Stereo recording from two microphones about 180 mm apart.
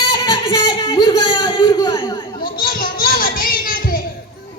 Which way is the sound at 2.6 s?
55° left (ahead or behind).